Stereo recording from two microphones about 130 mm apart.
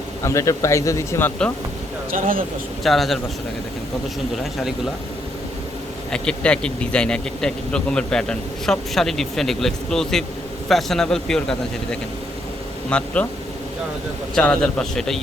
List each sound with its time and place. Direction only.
0.2 s speech: 25° left (ahead or behind)
2.1 s speech: 90° right
2.8 s speech: centre (ahead or behind)
6.1 s a man's voice: 5° left (ahead or behind)
14.3 s speech: 5° left (ahead or behind)